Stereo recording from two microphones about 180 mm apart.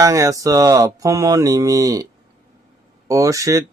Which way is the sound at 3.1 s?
20° right (ahead or behind).